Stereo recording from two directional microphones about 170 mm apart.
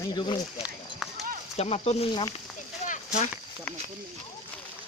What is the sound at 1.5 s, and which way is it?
Speech, 35° left (ahead or behind).